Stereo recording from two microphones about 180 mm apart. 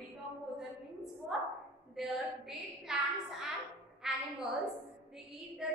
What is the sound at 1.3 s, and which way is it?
A woman's voice, 5° right (ahead or behind).